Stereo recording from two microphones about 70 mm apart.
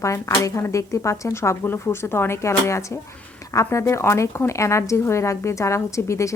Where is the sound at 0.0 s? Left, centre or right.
Left.